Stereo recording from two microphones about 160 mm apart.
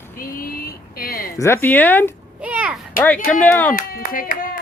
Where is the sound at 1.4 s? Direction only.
15° left (ahead or behind).